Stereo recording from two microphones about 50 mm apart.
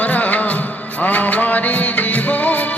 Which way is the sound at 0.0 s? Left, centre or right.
Left.